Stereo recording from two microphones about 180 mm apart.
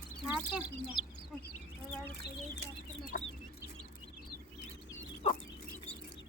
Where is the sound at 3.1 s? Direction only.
50° left (ahead or behind).